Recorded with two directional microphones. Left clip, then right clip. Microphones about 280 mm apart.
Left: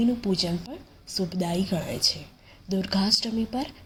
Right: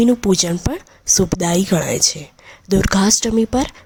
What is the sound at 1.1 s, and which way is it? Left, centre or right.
Speech, right.